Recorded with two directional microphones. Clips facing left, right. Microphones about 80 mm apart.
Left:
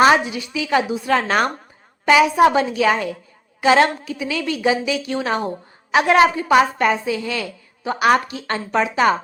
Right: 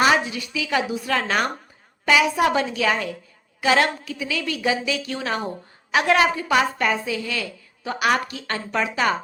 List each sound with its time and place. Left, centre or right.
0.3 s a woman's voice: left